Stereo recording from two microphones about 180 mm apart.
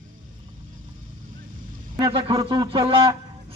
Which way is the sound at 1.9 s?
30° right (ahead or behind).